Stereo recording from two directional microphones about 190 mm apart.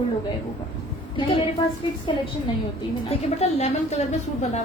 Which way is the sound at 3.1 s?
35° left (ahead or behind).